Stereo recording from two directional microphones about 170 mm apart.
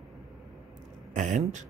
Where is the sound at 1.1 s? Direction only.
45° right (ahead or behind).